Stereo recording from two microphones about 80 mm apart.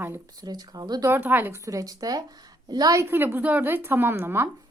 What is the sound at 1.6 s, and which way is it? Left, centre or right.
A woman's voice, right.